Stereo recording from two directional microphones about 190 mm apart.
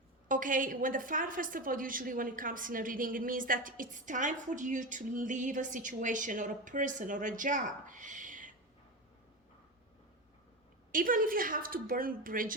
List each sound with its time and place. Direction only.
0.3 s a woman's voice: 45° right (ahead or behind)
10.9 s a woman's voice: 45° right (ahead or behind)